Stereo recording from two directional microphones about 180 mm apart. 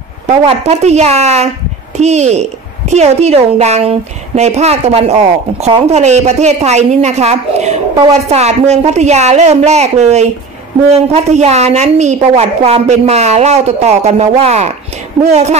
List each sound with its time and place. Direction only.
0.3 s a woman's voice: 40° right (ahead or behind)